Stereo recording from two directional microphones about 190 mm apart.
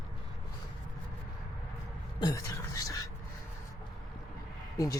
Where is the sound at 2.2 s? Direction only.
20° left (ahead or behind).